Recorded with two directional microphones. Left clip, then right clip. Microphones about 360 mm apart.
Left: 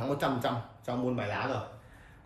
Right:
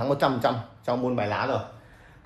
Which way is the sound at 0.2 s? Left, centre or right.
Right.